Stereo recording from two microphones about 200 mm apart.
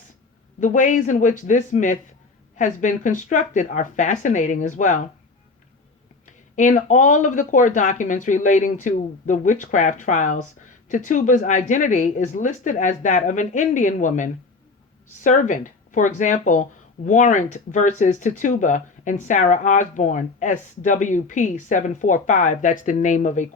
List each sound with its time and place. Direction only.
0.6 s speech: 40° left (ahead or behind)
6.2 s speech: 40° left (ahead or behind)